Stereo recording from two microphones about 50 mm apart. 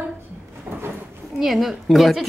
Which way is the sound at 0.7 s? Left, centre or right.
Right.